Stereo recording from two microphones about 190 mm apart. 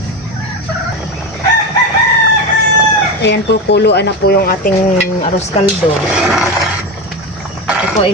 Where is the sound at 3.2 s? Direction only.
65° left (ahead or behind); by 4.7 s 50° left (ahead or behind).